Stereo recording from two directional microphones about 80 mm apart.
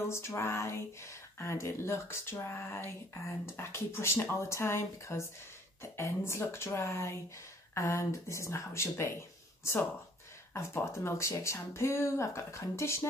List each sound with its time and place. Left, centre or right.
0.0 s speech: left
10.5 s speech: left